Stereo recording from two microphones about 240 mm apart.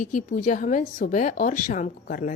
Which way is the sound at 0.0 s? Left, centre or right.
Left.